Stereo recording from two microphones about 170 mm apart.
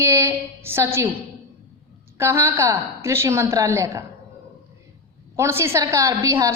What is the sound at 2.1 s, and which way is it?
A woman's voice, 15° right (ahead or behind).